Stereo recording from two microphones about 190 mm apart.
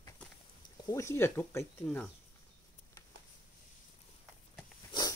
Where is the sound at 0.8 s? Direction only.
15° left (ahead or behind).